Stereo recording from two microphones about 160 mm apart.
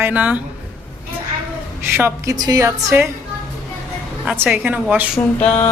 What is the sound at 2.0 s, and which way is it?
A woman's voice, 15° right (ahead or behind).